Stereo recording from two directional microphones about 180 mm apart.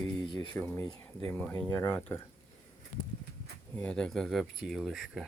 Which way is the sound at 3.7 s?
5° left (ahead or behind).